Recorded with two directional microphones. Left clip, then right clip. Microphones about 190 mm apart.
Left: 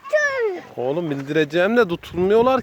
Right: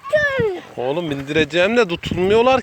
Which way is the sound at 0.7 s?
15° left (ahead or behind).